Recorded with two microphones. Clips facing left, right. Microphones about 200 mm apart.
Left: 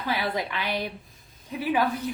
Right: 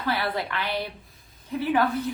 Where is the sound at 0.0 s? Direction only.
15° left (ahead or behind).